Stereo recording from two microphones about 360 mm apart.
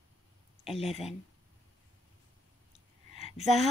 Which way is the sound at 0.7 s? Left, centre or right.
Centre.